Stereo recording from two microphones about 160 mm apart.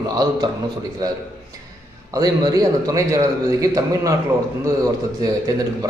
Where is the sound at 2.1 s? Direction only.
20° right (ahead or behind).